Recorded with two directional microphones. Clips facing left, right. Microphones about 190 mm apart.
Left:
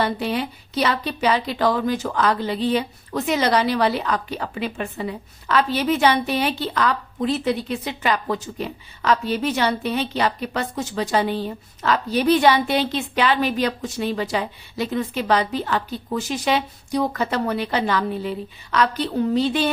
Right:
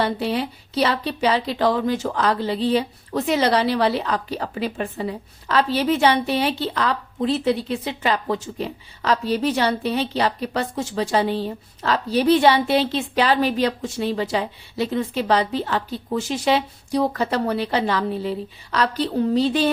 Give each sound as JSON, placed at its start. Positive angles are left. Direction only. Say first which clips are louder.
{"t": 0.0, "sound": "speech", "louder": "right 1 dB", "side_deg": -30}